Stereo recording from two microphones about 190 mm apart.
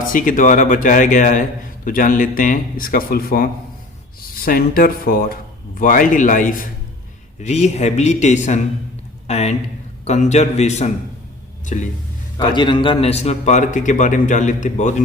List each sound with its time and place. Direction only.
0.0 s a man's voice: 45° left (ahead or behind)
12.5 s a man's voice: 25° left (ahead or behind)